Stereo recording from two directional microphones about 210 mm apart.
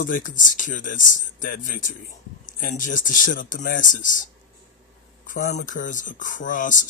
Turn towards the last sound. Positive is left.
turn(degrees=40)  # may be behind; listen again after turning